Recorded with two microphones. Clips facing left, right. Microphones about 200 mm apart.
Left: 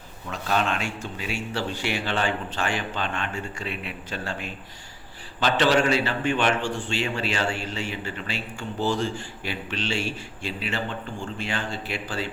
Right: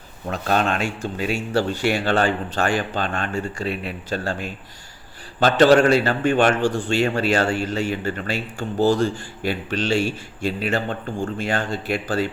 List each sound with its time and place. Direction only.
0.3 s a man's voice: 45° right (ahead or behind)